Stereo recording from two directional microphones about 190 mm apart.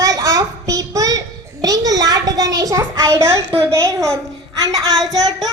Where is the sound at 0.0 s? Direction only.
20° right (ahead or behind).